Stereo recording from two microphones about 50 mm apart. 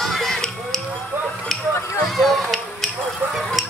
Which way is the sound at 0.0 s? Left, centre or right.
Centre.